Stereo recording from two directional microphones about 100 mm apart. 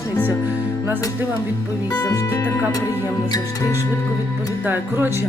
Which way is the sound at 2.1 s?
30° left (ahead or behind).